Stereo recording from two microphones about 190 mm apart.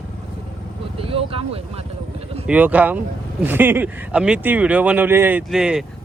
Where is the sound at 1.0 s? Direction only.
30° right (ahead or behind).